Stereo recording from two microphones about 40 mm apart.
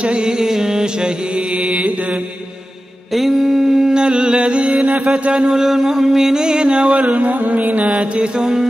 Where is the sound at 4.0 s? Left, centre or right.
Right.